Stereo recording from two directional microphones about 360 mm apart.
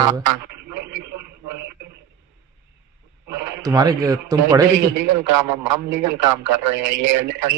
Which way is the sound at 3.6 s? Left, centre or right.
Centre.